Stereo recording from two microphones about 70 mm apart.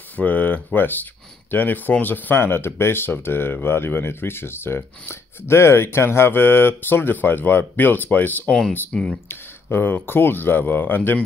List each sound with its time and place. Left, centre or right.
0.1 s speech: left
8.5 s speech: centre
9.3 s speech: left